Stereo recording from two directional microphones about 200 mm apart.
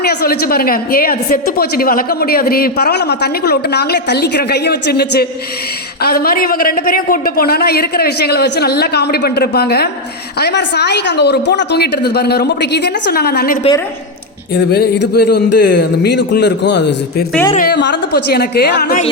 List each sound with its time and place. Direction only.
0.0 s a woman's voice: 50° left (ahead or behind)
17.5 s a woman's voice: 45° left (ahead or behind)
17.7 s a woman's voice: 60° left (ahead or behind)